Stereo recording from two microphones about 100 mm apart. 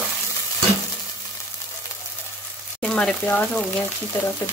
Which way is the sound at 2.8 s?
10° left (ahead or behind).